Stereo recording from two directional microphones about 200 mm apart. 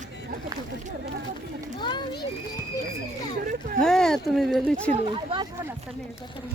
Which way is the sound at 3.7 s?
5° left (ahead or behind).